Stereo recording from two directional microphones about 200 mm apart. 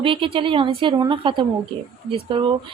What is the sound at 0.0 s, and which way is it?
A woman's voice, 25° right (ahead or behind).